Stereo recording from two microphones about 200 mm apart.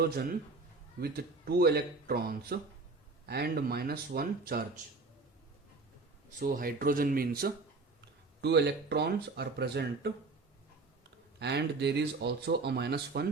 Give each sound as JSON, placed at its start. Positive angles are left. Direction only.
{"t": 0.0, "sound": "speech", "side_deg": -50}
{"t": 6.4, "sound": "speech", "side_deg": -45}
{"t": 11.3, "sound": "speech", "side_deg": -55}